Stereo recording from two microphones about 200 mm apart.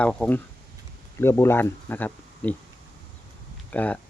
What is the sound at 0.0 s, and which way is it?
Speech, 5° left (ahead or behind).